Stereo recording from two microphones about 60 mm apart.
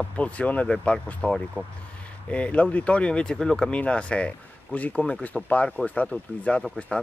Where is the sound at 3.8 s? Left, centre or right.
Left.